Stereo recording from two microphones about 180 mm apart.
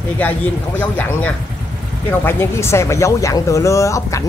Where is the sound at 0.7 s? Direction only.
10° left (ahead or behind).